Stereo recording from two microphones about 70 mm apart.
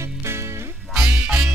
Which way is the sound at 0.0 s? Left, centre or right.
Right.